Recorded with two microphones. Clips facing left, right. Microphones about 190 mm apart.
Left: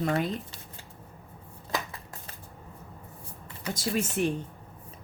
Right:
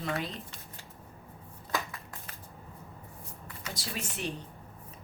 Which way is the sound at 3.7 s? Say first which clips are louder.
Left 12 dB; 50° left (ahead or behind).